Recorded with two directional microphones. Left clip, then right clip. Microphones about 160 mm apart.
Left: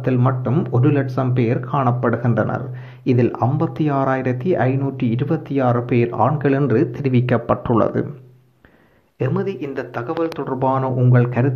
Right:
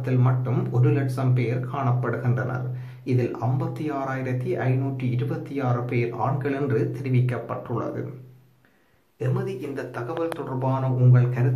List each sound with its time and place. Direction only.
0.0 s speech: 40° left (ahead or behind)
9.2 s speech: 35° left (ahead or behind)